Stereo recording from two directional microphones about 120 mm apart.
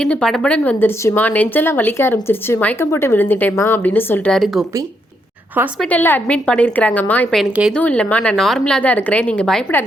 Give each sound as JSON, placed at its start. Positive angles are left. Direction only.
{"t": 0.0, "sound": "speech", "side_deg": 5}
{"t": 4.3, "sound": "speech", "side_deg": 0}
{"t": 5.9, "sound": "speech", "side_deg": 15}